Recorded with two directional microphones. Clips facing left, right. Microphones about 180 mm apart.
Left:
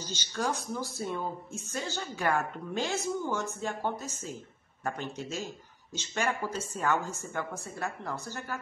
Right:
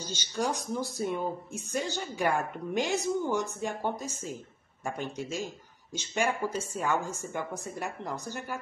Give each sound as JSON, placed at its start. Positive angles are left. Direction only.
{"t": 0.0, "sound": "speech", "side_deg": -10}